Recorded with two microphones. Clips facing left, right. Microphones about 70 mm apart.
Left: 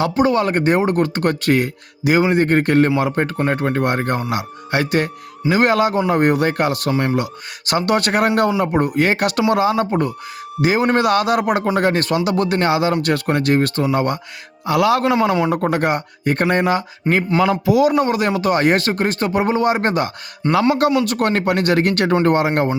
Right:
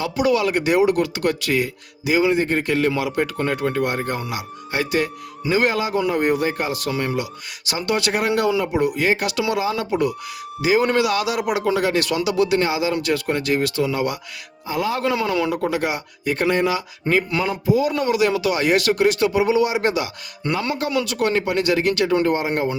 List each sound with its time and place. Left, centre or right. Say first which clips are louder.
0.2 s speech: left 1 dB; left
14.7 s a man's voice: left 7 dB; left
15.0 s speech: left 4 dB; left
17.4 s a man's voice: left 5 dB; left
17.9 s speech: left 2 dB; left
20.4 s speech: left 7 dB; left
21.0 s speech: left 3 dB; left